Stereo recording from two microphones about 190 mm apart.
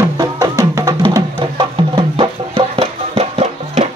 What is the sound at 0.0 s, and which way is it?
Music, 20° right (ahead or behind).